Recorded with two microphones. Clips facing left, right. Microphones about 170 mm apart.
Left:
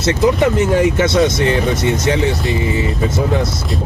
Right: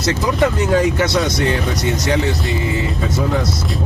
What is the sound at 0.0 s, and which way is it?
Speech, 20° left (ahead or behind).